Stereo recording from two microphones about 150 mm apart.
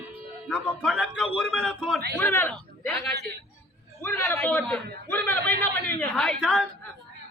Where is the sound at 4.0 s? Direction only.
15° left (ahead or behind).